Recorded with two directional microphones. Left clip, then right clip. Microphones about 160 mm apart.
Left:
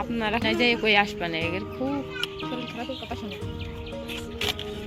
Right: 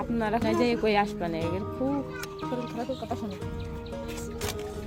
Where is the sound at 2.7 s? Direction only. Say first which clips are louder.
Right 1 dB; 30° right (ahead or behind).